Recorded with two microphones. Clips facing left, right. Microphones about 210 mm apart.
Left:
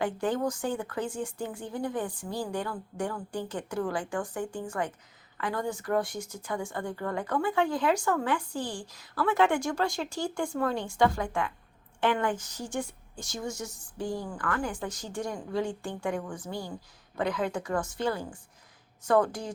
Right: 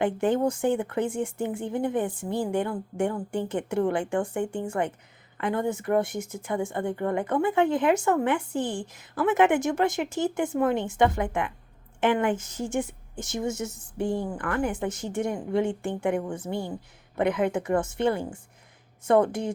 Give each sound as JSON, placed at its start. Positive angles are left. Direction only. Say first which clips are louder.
{"t": 0.0, "sound": "speech", "louder": "right 5 dB", "side_deg": -25}